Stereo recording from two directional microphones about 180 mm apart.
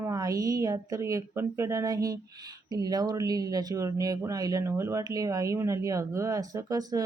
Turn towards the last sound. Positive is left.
turn(degrees=-20)  # may be behind; listen again after turning